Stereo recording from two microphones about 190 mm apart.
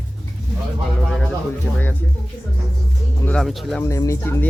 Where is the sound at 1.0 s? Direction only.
Centre (ahead or behind).